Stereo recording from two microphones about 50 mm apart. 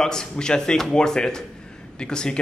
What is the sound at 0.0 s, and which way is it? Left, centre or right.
Speech, centre.